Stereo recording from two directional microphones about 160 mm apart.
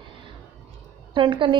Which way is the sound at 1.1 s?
30° right (ahead or behind).